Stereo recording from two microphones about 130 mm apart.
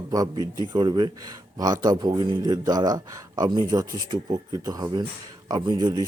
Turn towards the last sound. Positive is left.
turn(degrees=-30)  # may be behind; listen again after turning